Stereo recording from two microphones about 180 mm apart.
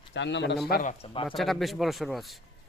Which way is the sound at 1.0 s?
30° left (ahead or behind).